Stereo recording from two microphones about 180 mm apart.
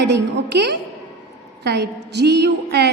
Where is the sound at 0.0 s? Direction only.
75° right (ahead or behind).